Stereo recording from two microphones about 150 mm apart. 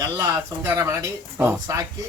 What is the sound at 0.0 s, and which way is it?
Speech, 20° right (ahead or behind).